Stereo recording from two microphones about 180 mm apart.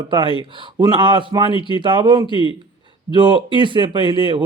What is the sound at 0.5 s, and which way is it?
Speech, 25° right (ahead or behind).